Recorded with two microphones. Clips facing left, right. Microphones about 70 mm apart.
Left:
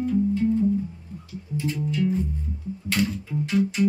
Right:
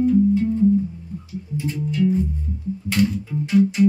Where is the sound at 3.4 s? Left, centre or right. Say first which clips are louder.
Right 6 dB; centre.